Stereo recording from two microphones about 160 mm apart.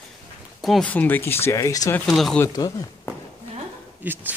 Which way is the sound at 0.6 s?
Centre (ahead or behind).